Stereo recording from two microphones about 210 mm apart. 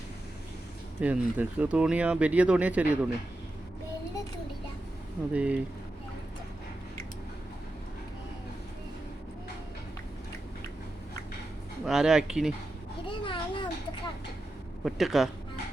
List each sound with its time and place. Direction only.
0.9 s speech: 5° right (ahead or behind)
5.3 s speech: 5° right (ahead or behind)
11.9 s speech: 5° right (ahead or behind)
13.1 s a sound: 25° left (ahead or behind)
14.8 s speech: centre (ahead or behind)